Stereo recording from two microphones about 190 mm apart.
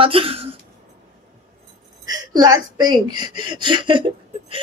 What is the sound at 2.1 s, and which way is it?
Speech, 20° right (ahead or behind).